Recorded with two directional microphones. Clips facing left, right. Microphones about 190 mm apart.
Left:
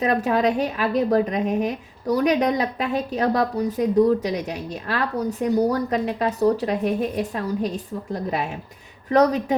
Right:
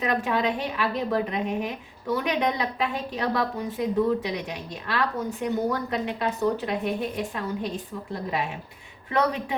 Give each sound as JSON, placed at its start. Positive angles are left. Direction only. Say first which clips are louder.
{"t": 0.0, "sound": "a woman's voice", "louder": "left 5 dB", "side_deg": 40}